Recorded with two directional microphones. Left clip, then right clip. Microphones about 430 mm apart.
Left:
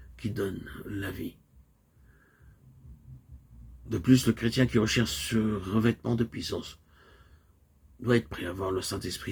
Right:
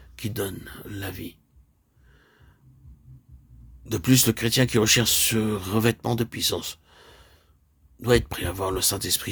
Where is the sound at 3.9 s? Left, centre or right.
Right.